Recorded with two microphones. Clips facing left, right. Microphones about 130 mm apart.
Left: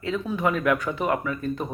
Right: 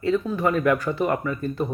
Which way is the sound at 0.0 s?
Centre (ahead or behind).